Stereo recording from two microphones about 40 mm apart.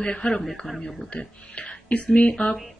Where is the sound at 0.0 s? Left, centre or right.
Left.